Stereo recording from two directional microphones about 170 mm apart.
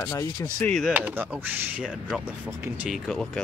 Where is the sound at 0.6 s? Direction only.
Centre (ahead or behind).